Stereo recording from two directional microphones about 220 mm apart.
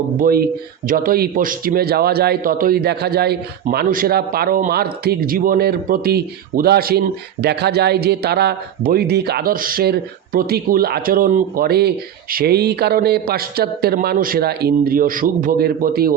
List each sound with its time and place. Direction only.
0.2 s a man's voice: 45° right (ahead or behind)